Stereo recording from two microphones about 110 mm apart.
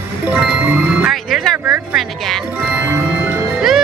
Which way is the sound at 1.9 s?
Centre (ahead or behind).